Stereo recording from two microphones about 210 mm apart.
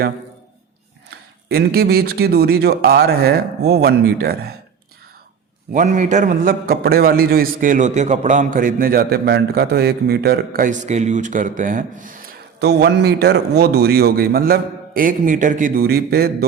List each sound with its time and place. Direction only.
1.1 s speech: 50° right (ahead or behind)
5.7 s a man's voice: 35° right (ahead or behind)
12.5 s speech: 55° right (ahead or behind)